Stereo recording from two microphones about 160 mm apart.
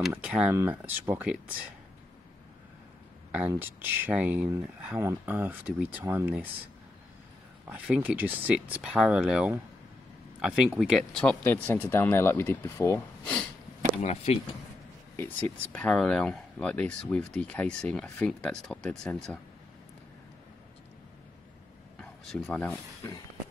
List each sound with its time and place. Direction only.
0.1 s speech: 5° right (ahead or behind)
3.3 s speech: 10° right (ahead or behind)
7.6 s speech: 5° right (ahead or behind)
14.0 s speech: 40° left (ahead or behind)
15.1 s speech: 10° left (ahead or behind)
22.3 s speech: 5° left (ahead or behind)